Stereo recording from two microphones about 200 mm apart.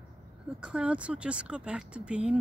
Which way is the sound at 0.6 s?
5° right (ahead or behind).